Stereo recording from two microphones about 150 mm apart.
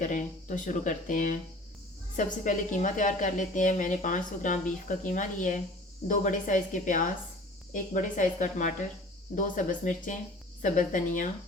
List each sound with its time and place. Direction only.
0.0 s a woman's voice: 55° left (ahead or behind)